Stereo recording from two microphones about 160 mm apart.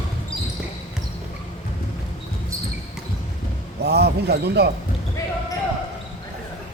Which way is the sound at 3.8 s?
90° right.